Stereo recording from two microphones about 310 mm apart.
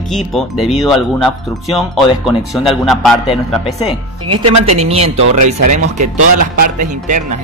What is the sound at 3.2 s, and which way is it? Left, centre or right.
Speech, centre.